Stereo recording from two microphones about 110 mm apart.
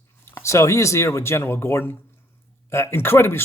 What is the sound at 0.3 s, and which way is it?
Speech, 25° left (ahead or behind).